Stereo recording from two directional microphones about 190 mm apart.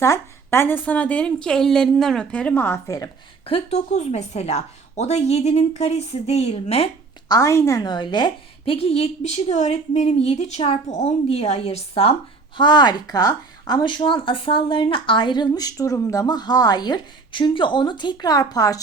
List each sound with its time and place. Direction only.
0.0 s a woman's voice: 15° left (ahead or behind)
3.4 s a woman's voice: 30° left (ahead or behind)
7.3 s a woman's voice: 15° left (ahead or behind)